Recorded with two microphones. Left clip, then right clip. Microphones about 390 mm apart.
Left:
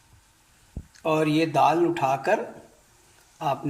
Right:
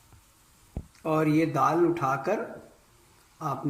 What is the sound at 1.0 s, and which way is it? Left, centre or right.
Speech, left.